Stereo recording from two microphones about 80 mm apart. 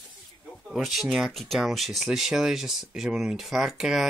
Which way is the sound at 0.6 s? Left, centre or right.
Centre.